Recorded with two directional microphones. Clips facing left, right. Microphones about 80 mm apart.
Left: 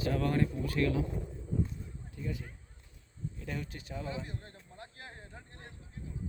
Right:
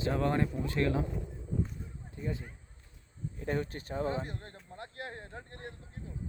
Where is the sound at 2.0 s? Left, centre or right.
Right.